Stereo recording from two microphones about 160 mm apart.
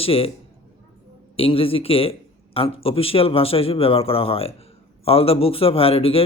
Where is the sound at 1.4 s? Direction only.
35° left (ahead or behind).